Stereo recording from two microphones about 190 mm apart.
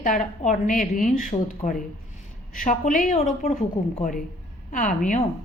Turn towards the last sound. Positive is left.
turn(degrees=45)  # may be behind; listen again after turning